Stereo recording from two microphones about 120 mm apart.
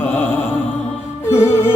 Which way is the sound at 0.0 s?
20° left (ahead or behind).